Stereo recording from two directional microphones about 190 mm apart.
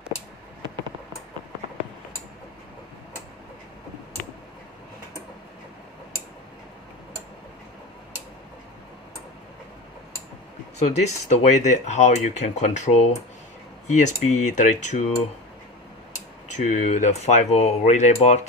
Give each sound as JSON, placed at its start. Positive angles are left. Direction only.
{"t": 10.8, "sound": "speech", "side_deg": 35}
{"t": 16.5, "sound": "speech", "side_deg": 40}